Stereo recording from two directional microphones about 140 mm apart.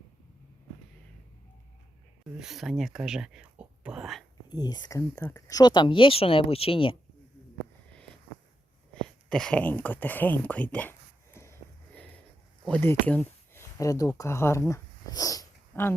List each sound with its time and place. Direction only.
2.4 s speech: centre (ahead or behind)
4.4 s speech: 30° left (ahead or behind)
9.0 s speech: 5° left (ahead or behind)
11.4 s a sound: 20° left (ahead or behind)
12.6 s speech: 15° left (ahead or behind)